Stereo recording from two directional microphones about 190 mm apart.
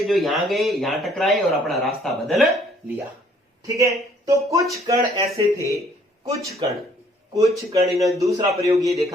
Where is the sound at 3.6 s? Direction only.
15° right (ahead or behind).